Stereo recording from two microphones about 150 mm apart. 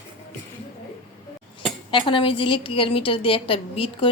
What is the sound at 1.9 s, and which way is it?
A woman's voice, 35° left (ahead or behind).